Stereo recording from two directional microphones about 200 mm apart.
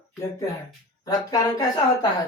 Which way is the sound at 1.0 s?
20° left (ahead or behind).